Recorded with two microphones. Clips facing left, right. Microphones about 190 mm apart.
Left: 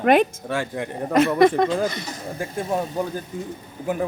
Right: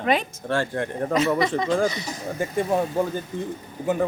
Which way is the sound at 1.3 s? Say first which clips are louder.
Left 7 dB; 55° left (ahead or behind).